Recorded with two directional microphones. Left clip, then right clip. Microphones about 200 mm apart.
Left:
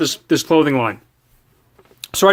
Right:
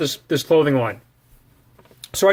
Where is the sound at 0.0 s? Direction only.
40° left (ahead or behind).